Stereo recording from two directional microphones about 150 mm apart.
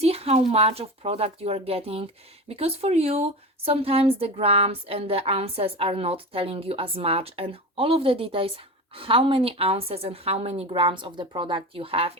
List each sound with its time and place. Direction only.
0.0 s a woman's voice: 40° right (ahead or behind)